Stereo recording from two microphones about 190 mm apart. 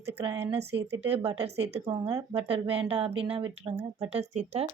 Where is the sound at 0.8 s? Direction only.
65° right (ahead or behind).